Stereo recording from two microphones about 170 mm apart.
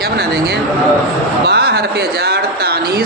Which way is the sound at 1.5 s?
70° right (ahead or behind).